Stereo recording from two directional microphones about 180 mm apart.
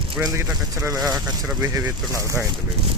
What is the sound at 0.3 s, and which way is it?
Speech, 20° right (ahead or behind).